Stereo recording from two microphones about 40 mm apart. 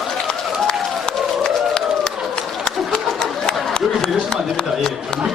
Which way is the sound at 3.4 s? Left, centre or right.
Centre.